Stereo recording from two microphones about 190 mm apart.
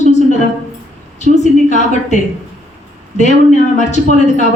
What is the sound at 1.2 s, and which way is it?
Speech, 40° left (ahead or behind).